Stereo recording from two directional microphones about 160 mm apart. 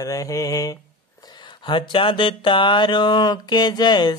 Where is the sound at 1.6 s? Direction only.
30° left (ahead or behind).